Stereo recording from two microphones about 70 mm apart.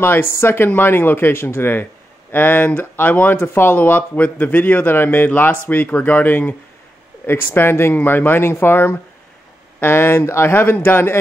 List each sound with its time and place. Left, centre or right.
0.0 s speech: left